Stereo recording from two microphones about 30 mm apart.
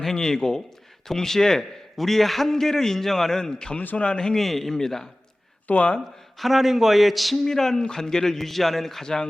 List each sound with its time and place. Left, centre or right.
0.1 s a man's voice: centre
4.7 s a man's voice: centre
5.7 s speech: left
6.4 s speech: centre
7.4 s a man's voice: centre